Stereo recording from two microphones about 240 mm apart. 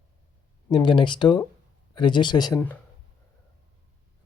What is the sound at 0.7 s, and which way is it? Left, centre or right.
Speech, centre.